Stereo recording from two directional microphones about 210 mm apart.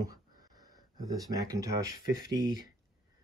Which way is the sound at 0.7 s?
20° right (ahead or behind).